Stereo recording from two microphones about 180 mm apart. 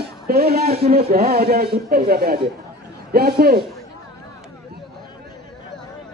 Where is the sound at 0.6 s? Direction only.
35° right (ahead or behind).